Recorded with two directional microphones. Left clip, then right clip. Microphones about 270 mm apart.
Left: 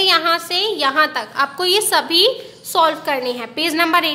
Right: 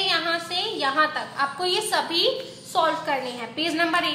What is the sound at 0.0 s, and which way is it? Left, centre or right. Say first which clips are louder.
A woman's voice: left 8 dB; left.